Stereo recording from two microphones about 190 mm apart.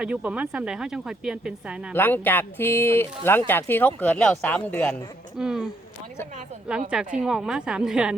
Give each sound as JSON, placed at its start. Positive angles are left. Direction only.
{"t": 0.0, "sound": "speech", "side_deg": -5}
{"t": 1.9, "sound": "speech", "side_deg": 10}
{"t": 5.4, "sound": "speech", "side_deg": -5}
{"t": 6.9, "sound": "speech", "side_deg": -5}